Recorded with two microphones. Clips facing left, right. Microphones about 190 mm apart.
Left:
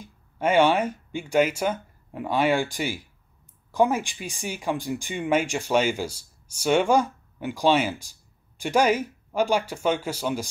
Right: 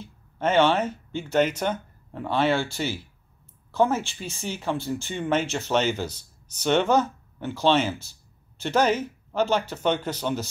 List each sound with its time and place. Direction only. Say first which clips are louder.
0.0 s speech: left 1 dB; 10° left (ahead or behind)